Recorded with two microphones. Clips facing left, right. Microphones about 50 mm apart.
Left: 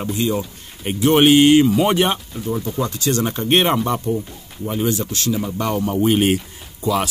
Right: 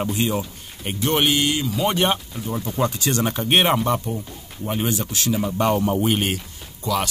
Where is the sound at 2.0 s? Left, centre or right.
Centre.